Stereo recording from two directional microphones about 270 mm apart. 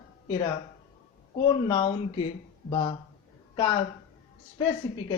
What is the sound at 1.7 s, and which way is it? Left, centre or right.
Speech, centre.